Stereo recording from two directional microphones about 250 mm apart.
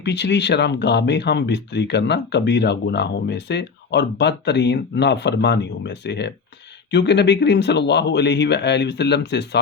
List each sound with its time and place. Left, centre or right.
0.0 s speech: left